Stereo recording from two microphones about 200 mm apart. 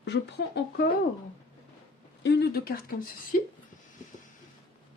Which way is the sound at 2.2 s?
55° left (ahead or behind).